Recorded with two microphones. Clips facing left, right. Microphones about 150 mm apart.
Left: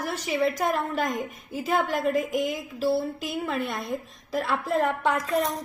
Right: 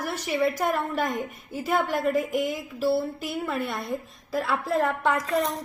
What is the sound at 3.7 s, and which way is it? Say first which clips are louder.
A woman's voice: even; centre (ahead or behind).